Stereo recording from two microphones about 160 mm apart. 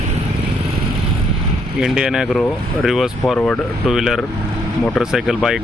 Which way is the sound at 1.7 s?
5° right (ahead or behind).